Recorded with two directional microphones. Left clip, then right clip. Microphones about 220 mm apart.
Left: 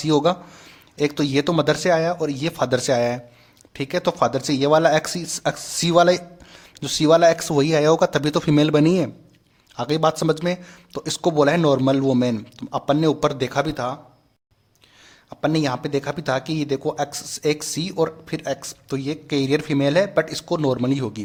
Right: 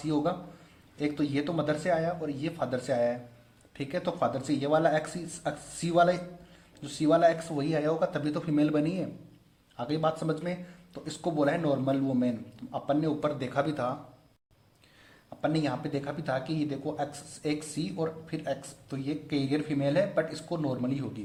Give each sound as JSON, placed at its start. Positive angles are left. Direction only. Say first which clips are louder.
{"t": 0.0, "sound": "speech", "louder": "left 11 dB", "side_deg": 40}
{"t": 15.4, "sound": "speech", "louder": "left 8 dB", "side_deg": 35}